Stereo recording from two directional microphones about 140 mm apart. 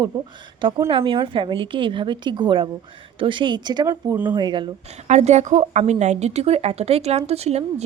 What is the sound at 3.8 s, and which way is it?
Speech, 15° right (ahead or behind).